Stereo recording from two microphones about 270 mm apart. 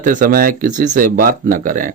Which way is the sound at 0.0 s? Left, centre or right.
Right.